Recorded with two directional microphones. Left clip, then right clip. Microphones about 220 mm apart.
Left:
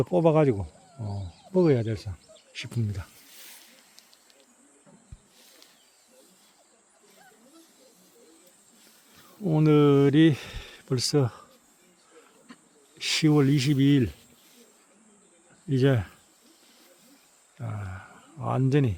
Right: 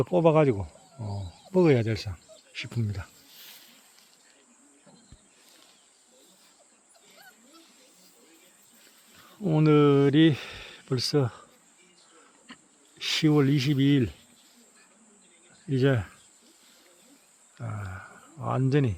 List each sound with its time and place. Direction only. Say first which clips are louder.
0.0 s speech: even; 5° left (ahead or behind)
1.5 s speech: right 1 dB; 5° right (ahead or behind)
2.5 s speech: even; 5° left (ahead or behind)
3.3 s a sound: right 1 dB; 15° left (ahead or behind)
9.4 s speech: even; centre (ahead or behind)
13.0 s speech: left 1 dB; 5° left (ahead or behind)
15.7 s speech: left 1 dB; 10° left (ahead or behind)
17.6 s speech: right 1 dB; 5° left (ahead or behind)